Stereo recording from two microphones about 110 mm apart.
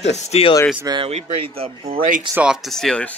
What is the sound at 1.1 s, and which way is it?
Speech, 70° right (ahead or behind).